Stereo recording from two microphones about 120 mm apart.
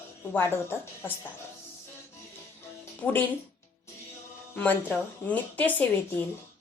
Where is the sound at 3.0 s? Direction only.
15° left (ahead or behind).